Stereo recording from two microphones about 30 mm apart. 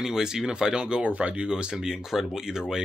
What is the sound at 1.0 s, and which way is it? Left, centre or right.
Speech, right.